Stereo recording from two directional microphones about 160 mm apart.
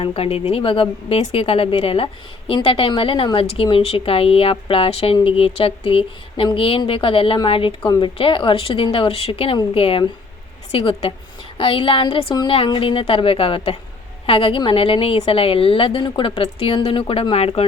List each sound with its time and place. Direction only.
0.0 s speech: 35° left (ahead or behind)
7.9 s speech: 20° left (ahead or behind)
8.2 s speech: 30° left (ahead or behind)